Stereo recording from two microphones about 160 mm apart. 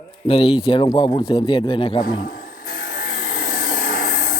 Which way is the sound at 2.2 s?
60° left (ahead or behind).